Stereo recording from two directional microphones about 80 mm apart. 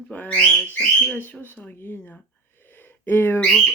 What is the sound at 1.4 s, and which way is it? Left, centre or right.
Speech, left.